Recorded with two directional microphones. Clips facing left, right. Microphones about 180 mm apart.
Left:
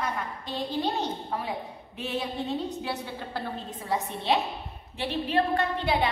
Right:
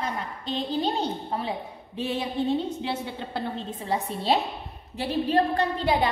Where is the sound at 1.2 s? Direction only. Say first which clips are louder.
Right 2 dB; 25° right (ahead or behind).